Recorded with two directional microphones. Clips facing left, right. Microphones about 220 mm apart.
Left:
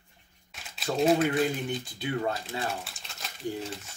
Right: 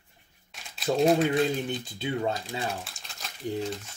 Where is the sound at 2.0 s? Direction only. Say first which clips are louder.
Right 2 dB; 25° right (ahead or behind).